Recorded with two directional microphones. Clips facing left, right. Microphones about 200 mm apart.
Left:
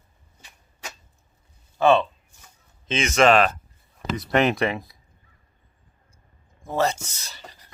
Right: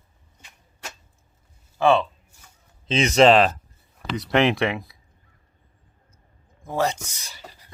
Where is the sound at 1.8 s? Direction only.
10° right (ahead or behind).